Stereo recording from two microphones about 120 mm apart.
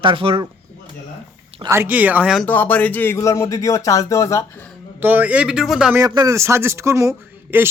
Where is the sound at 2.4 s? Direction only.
15° left (ahead or behind).